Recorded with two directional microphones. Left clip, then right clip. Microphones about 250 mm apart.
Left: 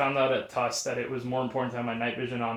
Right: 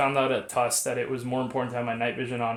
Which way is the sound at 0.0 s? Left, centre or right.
Right.